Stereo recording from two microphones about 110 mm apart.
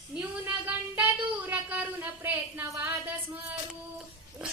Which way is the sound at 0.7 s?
15° right (ahead or behind).